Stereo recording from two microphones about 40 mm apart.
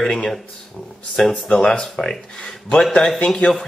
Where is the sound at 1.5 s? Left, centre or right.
Left.